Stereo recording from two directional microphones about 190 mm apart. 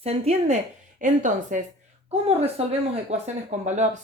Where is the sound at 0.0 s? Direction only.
35° right (ahead or behind).